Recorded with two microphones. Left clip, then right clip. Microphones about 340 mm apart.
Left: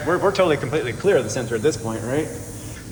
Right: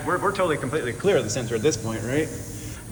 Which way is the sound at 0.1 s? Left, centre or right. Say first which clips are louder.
Left 5 dB; centre.